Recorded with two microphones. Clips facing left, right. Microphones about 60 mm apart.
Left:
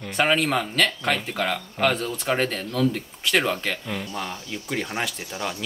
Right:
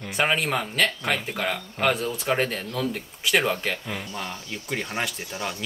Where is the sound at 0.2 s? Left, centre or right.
Centre.